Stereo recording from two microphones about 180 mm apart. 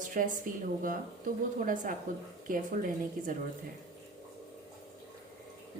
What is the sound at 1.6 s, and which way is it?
A woman's voice, 45° right (ahead or behind).